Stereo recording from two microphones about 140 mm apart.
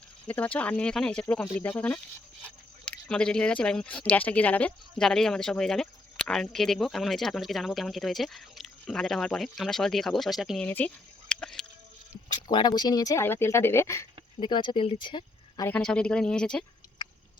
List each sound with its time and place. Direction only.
0.3 s speech: 10° left (ahead or behind)
10.7 s speech: 10° left (ahead or behind)
12.3 s speech: 35° left (ahead or behind)
14.3 s speech: 35° left (ahead or behind)
15.0 s a sound: 35° left (ahead or behind)
15.7 s speech: 5° left (ahead or behind)